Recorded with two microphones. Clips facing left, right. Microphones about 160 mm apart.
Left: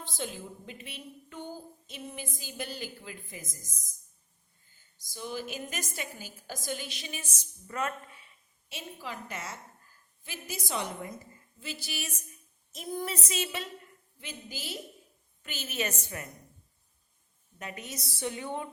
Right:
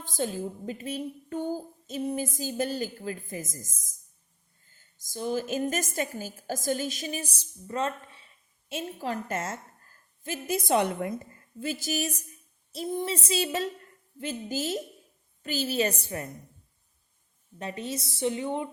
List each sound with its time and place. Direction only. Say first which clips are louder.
0.0 s speech: right 7 dB; 45° right (ahead or behind)
4.9 s speech: right 8 dB; 45° right (ahead or behind); by 8.3 s 30° right (ahead or behind)
8.7 s a woman's voice: right 9 dB; 50° right (ahead or behind)
11.6 s speech: right 10 dB; 45° right (ahead or behind)
12.7 s child singing: right 5 dB; 30° right (ahead or behind)
14.2 s speech: right 12 dB; 45° right (ahead or behind)
15.4 s child singing: right 8 dB; 35° right (ahead or behind)
17.6 s a woman's voice: right 7 dB; 30° right (ahead or behind)